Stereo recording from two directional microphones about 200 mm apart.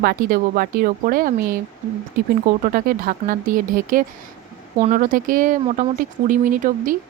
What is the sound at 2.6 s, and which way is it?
A woman's voice, 45° right (ahead or behind).